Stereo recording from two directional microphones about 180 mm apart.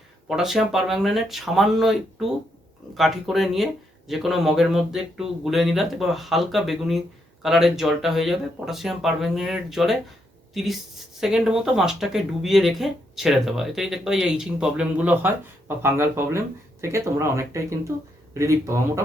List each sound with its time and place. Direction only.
0.3 s speech: centre (ahead or behind)